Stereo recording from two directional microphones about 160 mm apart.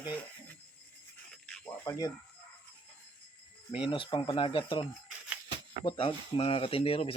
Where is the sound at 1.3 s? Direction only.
5° left (ahead or behind).